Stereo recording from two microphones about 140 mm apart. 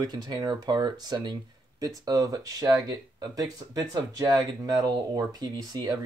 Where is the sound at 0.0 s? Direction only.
30° right (ahead or behind).